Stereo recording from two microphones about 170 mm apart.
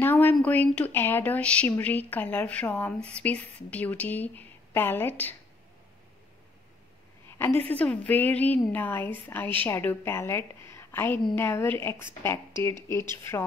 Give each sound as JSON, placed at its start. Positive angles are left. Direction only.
{"t": 0.0, "sound": "a woman's voice", "side_deg": 10}
{"t": 7.2, "sound": "a woman's voice", "side_deg": 15}